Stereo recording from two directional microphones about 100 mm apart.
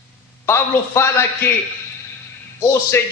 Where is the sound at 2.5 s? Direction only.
25° left (ahead or behind).